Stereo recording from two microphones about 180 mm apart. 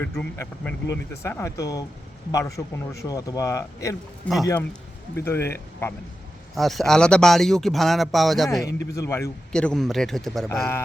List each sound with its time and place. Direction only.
0.0 s speech: 10° left (ahead or behind)
6.6 s speech: centre (ahead or behind)
9.0 s speech: 15° left (ahead or behind)
9.5 s speech: 5° left (ahead or behind)